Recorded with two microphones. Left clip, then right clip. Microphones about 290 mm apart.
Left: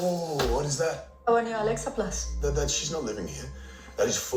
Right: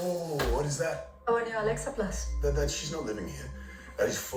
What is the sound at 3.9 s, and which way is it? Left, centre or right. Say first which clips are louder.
Speech: left 3 dB; left.